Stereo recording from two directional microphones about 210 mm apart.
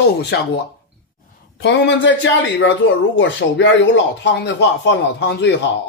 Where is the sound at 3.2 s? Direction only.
60° left (ahead or behind).